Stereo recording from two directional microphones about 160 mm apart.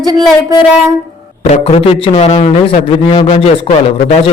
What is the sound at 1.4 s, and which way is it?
A man's voice, 40° left (ahead or behind).